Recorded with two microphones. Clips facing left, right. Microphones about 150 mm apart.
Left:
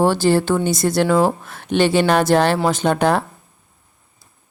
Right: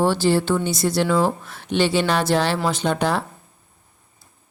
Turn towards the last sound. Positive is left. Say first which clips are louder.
# left 4 dB
turn(degrees=50)  # may be behind; listen again after turning